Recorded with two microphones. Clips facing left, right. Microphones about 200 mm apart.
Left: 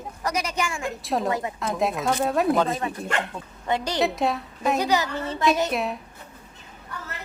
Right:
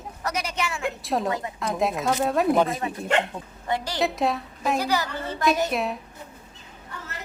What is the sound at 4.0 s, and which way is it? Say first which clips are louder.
Speech: right 1 dB; centre (ahead or behind).